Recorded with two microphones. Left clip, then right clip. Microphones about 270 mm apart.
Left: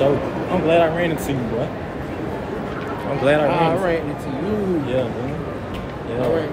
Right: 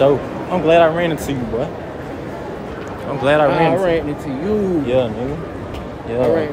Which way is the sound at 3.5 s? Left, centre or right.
Right.